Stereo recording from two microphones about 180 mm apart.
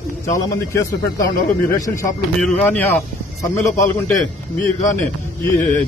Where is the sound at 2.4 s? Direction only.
5° left (ahead or behind).